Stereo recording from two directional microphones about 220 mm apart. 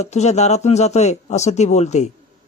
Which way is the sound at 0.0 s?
30° left (ahead or behind).